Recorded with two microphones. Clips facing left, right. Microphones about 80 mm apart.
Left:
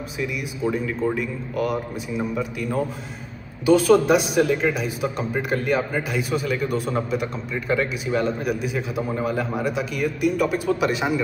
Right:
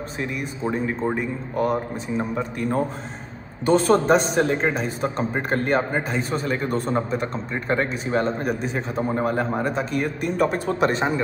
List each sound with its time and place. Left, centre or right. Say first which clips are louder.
0.2 s a man's voice: left 2 dB; right